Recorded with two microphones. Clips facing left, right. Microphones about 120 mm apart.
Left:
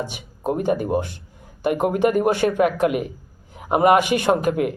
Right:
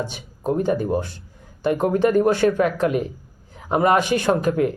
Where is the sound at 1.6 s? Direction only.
15° left (ahead or behind).